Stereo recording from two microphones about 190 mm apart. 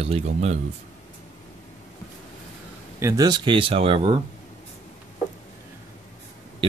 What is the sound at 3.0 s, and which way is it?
Speech, 20° right (ahead or behind).